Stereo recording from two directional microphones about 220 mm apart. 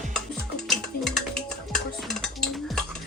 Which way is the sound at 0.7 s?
Centre (ahead or behind).